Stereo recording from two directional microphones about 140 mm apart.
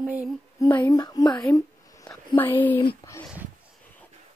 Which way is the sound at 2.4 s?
15° left (ahead or behind).